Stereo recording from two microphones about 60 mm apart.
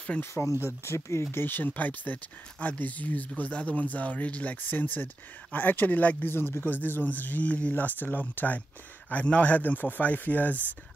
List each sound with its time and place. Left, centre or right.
0.2 s speech: left
1.2 s speech: left